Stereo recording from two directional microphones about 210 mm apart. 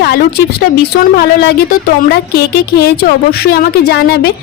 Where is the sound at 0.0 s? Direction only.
50° left (ahead or behind).